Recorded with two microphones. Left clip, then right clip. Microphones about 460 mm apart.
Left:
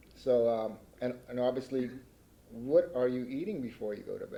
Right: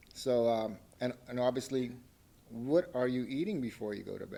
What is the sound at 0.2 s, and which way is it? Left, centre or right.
A man's voice, right.